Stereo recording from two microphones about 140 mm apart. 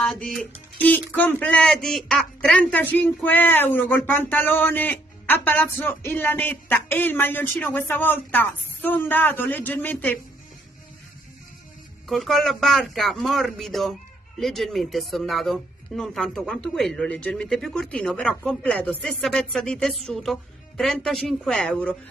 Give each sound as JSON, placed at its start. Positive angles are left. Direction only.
{"t": 0.0, "sound": "speech", "side_deg": 5}
{"t": 12.1, "sound": "speech", "side_deg": 0}